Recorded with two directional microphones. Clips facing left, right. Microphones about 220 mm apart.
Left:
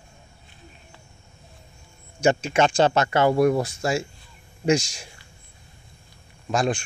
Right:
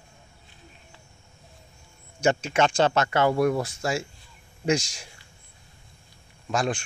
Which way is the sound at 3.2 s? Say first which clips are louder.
Left 3 dB; 35° left (ahead or behind).